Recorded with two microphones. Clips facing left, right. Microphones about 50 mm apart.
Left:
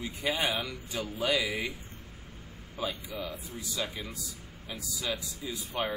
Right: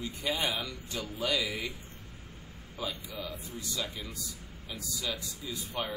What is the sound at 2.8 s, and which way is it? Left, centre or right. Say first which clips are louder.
Speech: left 3 dB; centre.